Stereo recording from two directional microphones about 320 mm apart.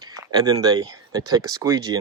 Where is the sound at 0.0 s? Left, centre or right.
Centre.